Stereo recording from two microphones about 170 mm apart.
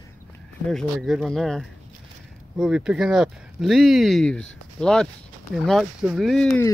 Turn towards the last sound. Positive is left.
turn(degrees=0)  # may be behind; listen again after turning